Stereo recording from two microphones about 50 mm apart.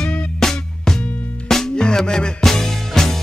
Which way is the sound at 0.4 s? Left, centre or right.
Centre.